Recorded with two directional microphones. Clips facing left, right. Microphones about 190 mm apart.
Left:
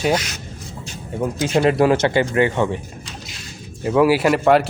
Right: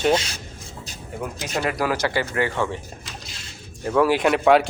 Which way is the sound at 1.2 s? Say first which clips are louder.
Left 9 dB; 30° left (ahead or behind).